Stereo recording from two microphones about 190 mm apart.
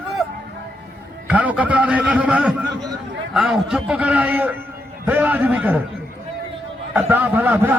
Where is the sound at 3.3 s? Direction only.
5° right (ahead or behind).